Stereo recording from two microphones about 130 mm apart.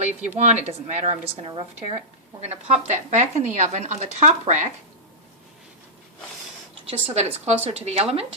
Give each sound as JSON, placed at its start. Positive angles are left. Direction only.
{"t": 0.0, "sound": "speech", "side_deg": -60}
{"t": 1.5, "sound": "speech", "side_deg": -40}
{"t": 2.4, "sound": "speech", "side_deg": -55}
{"t": 7.1, "sound": "a woman's voice", "side_deg": -55}